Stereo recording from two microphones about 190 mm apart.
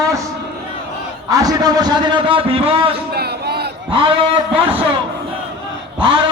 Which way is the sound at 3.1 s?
55° right (ahead or behind).